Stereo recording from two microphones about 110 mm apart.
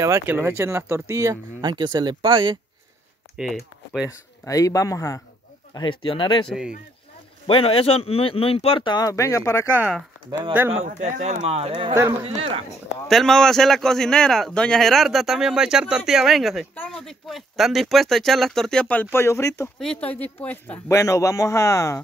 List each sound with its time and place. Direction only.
0.3 s speech: 20° right (ahead or behind); by 2.6 s 45° right (ahead or behind)
3.3 s speech: 5° right (ahead or behind)
4.1 s speech: 30° left (ahead or behind)
5.8 s speech: 50° left (ahead or behind)
7.4 s speech: 55° left (ahead or behind); by 9.7 s 25° left (ahead or behind)
10.7 s speech: 90° right; by 11.7 s 70° right (ahead or behind)
11.9 s speech: 25° right (ahead or behind)
12.4 s speech: 60° right (ahead or behind)
13.1 s a man's voice: 5° left (ahead or behind)
19.1 s speech: 25° left (ahead or behind)
19.8 s speech: 10° left (ahead or behind)
21.0 s speech: 30° left (ahead or behind)